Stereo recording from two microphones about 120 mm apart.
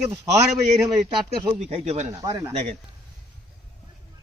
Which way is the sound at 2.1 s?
25° right (ahead or behind).